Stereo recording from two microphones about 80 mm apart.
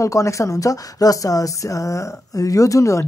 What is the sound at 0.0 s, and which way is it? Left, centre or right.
A woman's voice, left.